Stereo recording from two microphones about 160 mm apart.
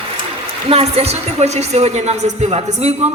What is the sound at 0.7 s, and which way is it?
A woman's voice, 40° right (ahead or behind).